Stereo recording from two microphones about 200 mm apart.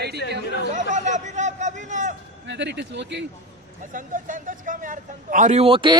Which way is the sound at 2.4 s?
60° right (ahead or behind).